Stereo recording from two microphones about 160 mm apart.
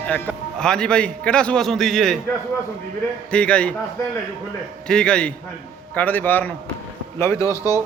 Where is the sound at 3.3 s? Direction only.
5° left (ahead or behind).